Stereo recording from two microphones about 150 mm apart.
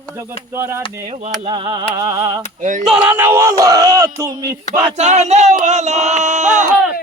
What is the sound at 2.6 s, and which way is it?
Male singing, 55° right (ahead or behind).